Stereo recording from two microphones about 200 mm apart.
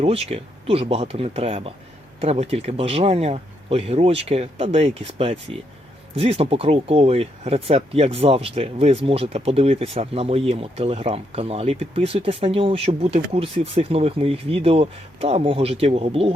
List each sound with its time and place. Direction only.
0.0 s speech: 30° right (ahead or behind)